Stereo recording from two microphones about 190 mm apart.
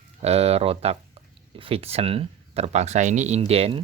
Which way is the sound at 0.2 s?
35° right (ahead or behind).